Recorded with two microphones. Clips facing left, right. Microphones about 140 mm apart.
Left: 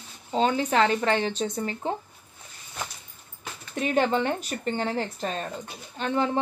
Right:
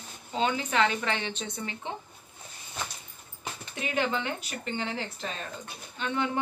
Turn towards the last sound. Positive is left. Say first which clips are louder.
# left 4 dB
turn(degrees=35)  # may be behind; listen again after turning